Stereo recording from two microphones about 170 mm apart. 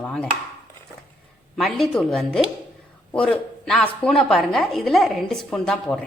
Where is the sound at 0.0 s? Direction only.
5° left (ahead or behind).